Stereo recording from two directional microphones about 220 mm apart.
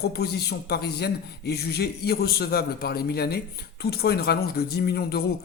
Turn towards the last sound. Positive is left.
turn(degrees=45)  # may be behind; listen again after turning